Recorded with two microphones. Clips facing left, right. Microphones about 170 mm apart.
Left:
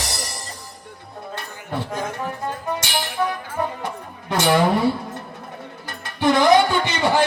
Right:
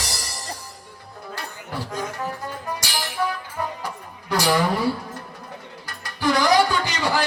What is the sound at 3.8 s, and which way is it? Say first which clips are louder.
Music: left 3 dB; 25° left (ahead or behind).